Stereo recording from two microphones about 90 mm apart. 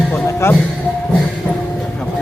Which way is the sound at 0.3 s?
30° left (ahead or behind).